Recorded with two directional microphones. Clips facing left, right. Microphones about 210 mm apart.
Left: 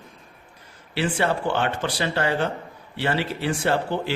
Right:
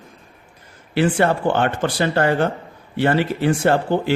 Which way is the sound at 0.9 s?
50° right (ahead or behind).